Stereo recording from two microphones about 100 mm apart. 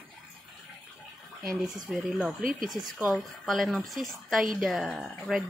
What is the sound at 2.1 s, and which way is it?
A woman's voice, centre (ahead or behind).